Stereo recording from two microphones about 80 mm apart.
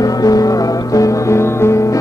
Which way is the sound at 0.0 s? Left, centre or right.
Left.